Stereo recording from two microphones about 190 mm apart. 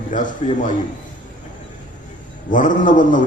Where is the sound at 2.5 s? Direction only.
45° left (ahead or behind).